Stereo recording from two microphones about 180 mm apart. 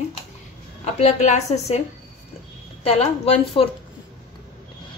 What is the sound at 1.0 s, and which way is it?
Speech, 40° left (ahead or behind).